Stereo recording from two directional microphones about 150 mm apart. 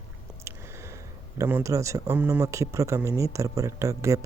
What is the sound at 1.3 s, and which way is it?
A man's voice, 20° right (ahead or behind).